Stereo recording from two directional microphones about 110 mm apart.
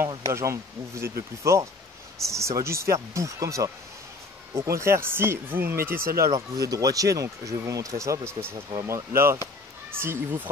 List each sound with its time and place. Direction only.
0.3 s speech: 25° right (ahead or behind)